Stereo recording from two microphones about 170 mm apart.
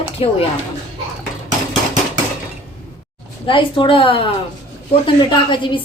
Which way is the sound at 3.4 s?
30° left (ahead or behind).